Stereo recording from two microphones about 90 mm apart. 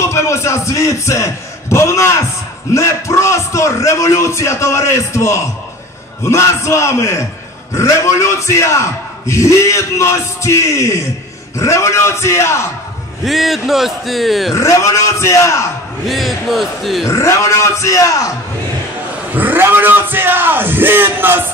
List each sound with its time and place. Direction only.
0.0 s a man's voice: 30° left (ahead or behind)
13.2 s a man's voice: 5° right (ahead or behind)
14.5 s a man's voice: 35° left (ahead or behind)
16.1 s a man's voice: centre (ahead or behind)
17.1 s a man's voice: 35° left (ahead or behind)
19.3 s speech: 20° right (ahead or behind)